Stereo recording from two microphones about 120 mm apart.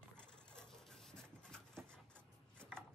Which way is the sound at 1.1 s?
5° left (ahead or behind).